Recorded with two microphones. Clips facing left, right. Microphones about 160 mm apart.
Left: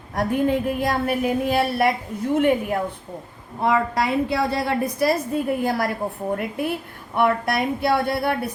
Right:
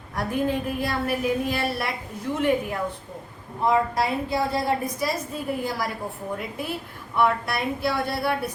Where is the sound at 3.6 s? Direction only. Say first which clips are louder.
Left 1 dB; 70° left (ahead or behind).